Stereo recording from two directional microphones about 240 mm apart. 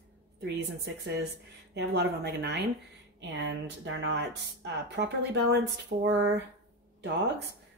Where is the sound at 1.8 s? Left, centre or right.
Right.